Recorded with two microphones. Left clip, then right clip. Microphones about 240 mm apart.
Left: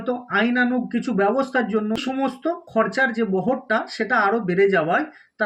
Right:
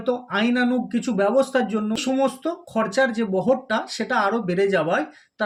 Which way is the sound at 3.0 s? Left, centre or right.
Centre.